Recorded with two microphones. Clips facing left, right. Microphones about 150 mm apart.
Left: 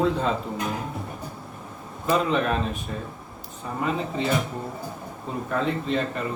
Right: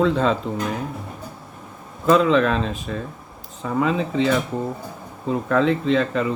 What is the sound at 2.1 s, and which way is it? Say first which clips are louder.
Speech: right 6 dB; 90° right.